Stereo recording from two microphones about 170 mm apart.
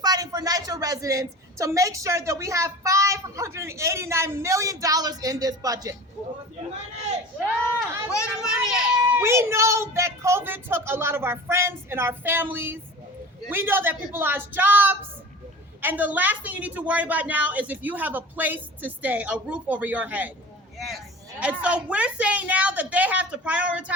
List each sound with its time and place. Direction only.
0.0 s a woman's voice: 20° right (ahead or behind)
8.1 s a sound: 20° left (ahead or behind)
9.1 s a woman's voice: 15° right (ahead or behind)